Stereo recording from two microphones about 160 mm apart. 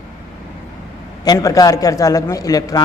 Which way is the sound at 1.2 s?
20° left (ahead or behind).